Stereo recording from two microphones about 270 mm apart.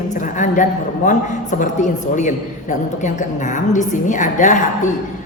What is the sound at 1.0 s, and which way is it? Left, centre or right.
A woman's voice, left.